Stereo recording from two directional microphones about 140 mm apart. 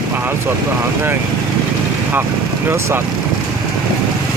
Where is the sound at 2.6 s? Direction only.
15° right (ahead or behind).